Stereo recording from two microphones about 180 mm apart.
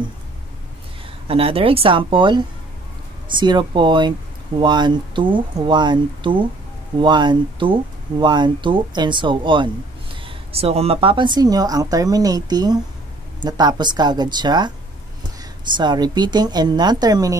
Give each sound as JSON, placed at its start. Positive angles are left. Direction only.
{"t": 1.2, "sound": "speech", "side_deg": -30}
{"t": 15.7, "sound": "speech", "side_deg": -25}